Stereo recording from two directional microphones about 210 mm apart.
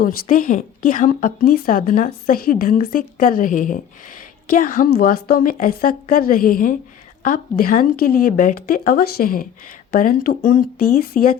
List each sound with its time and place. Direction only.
0.0 s a woman's voice: 40° left (ahead or behind)